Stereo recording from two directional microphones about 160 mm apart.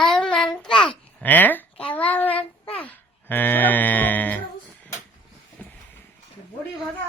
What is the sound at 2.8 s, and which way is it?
Music, 10° left (ahead or behind).